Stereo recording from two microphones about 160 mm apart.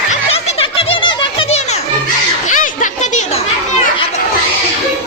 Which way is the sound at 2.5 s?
55° left (ahead or behind).